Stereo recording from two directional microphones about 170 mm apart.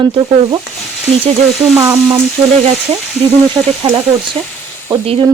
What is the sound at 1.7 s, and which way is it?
Frying, 20° right (ahead or behind).